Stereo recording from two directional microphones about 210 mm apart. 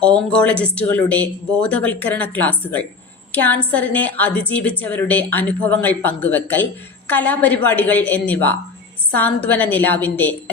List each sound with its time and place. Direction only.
0.0 s speech: 5° left (ahead or behind)